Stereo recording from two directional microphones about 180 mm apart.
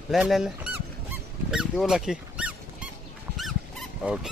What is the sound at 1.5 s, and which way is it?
Squeak, 5° right (ahead or behind).